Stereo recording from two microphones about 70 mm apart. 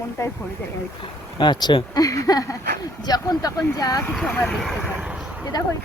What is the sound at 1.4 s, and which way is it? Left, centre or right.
Speech, left.